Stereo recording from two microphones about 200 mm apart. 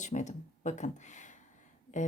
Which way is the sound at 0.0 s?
35° left (ahead or behind).